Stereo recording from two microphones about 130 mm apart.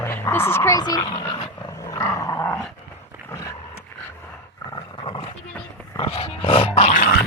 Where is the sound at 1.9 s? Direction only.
25° left (ahead or behind).